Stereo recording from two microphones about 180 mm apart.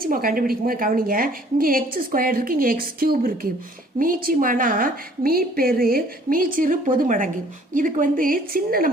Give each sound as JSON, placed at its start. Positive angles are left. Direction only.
{"t": 0.0, "sound": "a woman's voice", "side_deg": -55}